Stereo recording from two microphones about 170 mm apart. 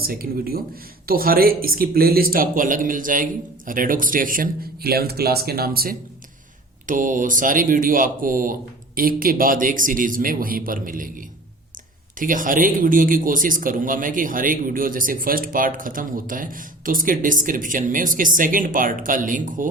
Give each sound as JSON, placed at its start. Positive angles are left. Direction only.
{"t": 0.0, "sound": "a man's voice", "side_deg": -60}
{"t": 6.8, "sound": "a man's voice", "side_deg": -50}